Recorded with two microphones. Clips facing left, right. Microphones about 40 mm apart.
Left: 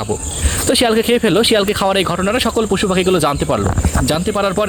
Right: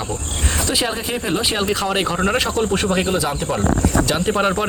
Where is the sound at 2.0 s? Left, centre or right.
Centre.